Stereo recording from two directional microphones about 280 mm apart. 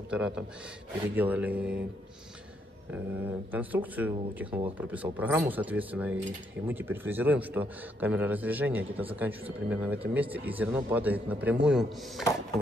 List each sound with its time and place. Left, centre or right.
0.1 s speech: centre
2.9 s speech: centre